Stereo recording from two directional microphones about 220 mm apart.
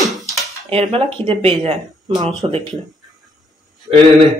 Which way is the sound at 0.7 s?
25° right (ahead or behind).